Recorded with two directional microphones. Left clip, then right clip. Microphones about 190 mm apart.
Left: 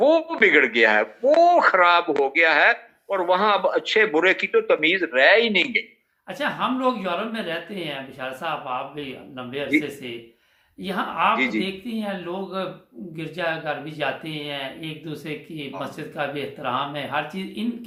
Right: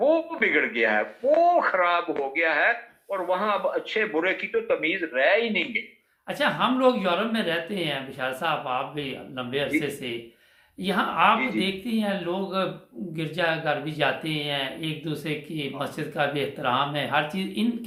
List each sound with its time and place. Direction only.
0.0 s speech: 45° left (ahead or behind)
6.2 s speech: 15° right (ahead or behind)
10.8 s speech: 10° right (ahead or behind)